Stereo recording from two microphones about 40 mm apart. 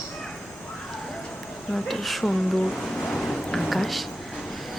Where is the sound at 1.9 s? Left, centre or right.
Centre.